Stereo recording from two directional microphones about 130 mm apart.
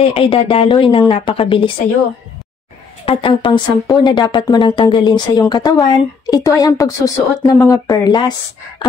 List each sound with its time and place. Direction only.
0.0 s a woman's voice: 45° left (ahead or behind)
3.1 s speech: 40° left (ahead or behind)